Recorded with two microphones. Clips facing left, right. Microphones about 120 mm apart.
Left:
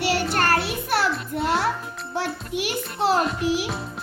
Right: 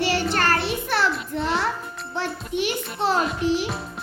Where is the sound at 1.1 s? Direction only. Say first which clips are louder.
Left 1 dB; 5° left (ahead or behind).